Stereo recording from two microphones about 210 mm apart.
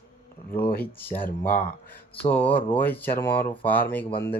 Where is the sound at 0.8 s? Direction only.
10° left (ahead or behind).